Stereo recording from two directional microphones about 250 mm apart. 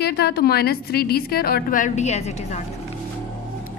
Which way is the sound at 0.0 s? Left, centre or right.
Left.